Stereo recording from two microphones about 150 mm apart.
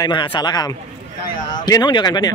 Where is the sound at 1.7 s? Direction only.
30° left (ahead or behind).